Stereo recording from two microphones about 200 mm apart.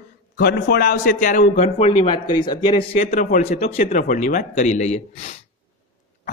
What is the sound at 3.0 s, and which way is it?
A man's voice, 40° left (ahead or behind).